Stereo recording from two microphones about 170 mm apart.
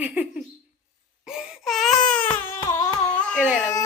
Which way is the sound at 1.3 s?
Centre (ahead or behind).